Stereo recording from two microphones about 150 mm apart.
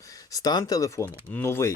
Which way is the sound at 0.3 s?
25° left (ahead or behind).